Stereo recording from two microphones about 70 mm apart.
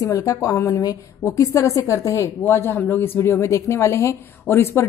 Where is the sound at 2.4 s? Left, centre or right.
Left.